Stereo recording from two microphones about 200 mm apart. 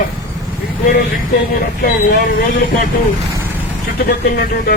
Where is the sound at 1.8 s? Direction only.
55° left (ahead or behind).